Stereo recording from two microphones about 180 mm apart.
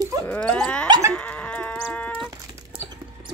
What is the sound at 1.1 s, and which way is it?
Chicken, 10° left (ahead or behind).